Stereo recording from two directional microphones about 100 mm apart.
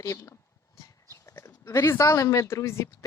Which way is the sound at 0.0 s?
30° left (ahead or behind).